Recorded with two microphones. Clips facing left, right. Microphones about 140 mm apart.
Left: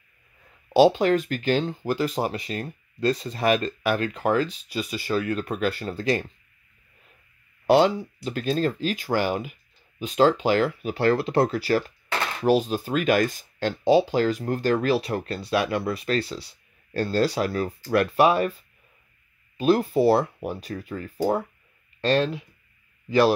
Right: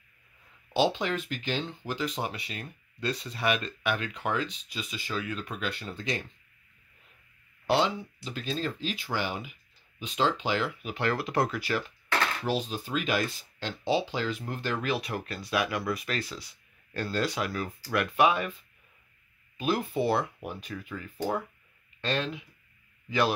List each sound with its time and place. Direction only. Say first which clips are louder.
0.7 s speech: left 9 dB; 45° left (ahead or behind)
4.7 s speech: left 9 dB; 55° left (ahead or behind)
7.6 s speech: left 8 dB; 45° left (ahead or behind)
12.5 s speech: left 8 dB; 50° left (ahead or behind)
19.5 s speech: left 8 dB; 35° left (ahead or behind)